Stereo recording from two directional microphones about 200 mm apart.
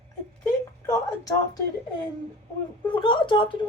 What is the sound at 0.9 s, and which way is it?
Speech, 20° left (ahead or behind).